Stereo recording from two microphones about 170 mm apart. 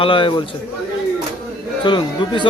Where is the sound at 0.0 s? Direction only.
30° left (ahead or behind).